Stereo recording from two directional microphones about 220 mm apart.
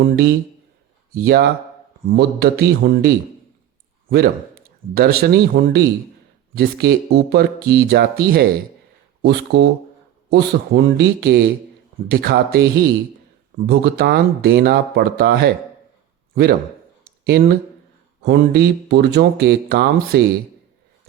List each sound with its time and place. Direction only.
0.0 s a man's voice: 45° right (ahead or behind)